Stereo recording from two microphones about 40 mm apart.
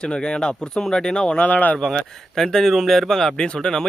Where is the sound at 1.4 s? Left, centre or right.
Left.